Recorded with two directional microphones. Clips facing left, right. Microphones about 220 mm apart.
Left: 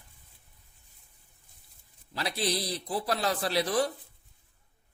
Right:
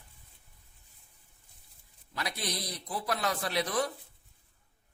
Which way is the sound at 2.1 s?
30° left (ahead or behind).